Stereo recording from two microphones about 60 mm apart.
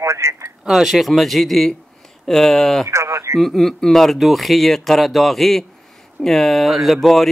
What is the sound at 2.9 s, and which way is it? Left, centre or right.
Speech, right.